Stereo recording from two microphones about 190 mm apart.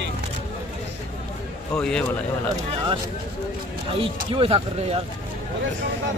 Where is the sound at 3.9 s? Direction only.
30° right (ahead or behind).